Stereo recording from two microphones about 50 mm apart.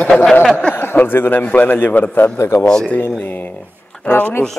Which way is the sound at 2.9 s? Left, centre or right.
Left.